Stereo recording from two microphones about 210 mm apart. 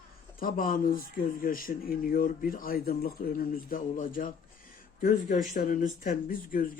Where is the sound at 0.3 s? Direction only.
40° left (ahead or behind).